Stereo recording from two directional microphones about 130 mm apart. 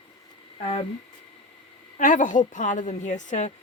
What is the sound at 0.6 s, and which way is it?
Speech, 50° left (ahead or behind).